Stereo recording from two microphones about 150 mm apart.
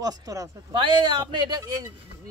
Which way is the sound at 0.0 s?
25° right (ahead or behind).